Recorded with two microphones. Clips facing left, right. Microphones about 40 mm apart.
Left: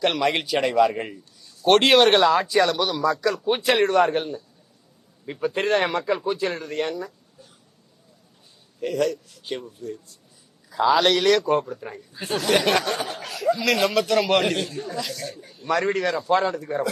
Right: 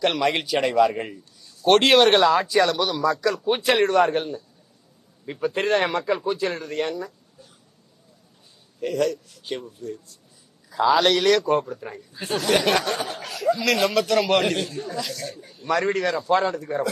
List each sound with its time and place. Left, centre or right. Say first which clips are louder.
0.0 s a man's voice: even; centre
8.8 s a man's voice: even; centre